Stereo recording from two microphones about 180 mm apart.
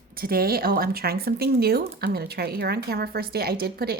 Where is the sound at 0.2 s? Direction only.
55° right (ahead or behind).